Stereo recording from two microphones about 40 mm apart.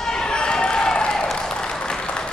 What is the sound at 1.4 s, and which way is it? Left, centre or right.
Applause, centre.